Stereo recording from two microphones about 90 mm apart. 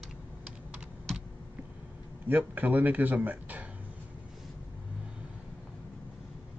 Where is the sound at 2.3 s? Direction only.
20° right (ahead or behind).